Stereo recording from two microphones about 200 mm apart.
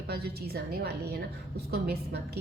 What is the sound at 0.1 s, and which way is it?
Speech, 55° right (ahead or behind).